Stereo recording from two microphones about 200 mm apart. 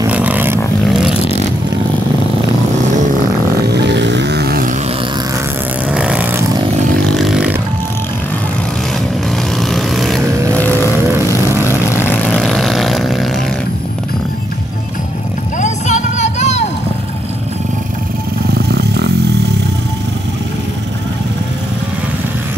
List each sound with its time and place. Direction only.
0.1 s vehicle: 10° right (ahead or behind)
3.6 s vehicle: 60° right (ahead or behind)
5.9 s vehicle: 5° right (ahead or behind)
7.1 s a sound: centre (ahead or behind)
9.6 s vehicle: centre (ahead or behind)
15.6 s a sound: 35° left (ahead or behind)
18.5 s vehicle: 55° right (ahead or behind)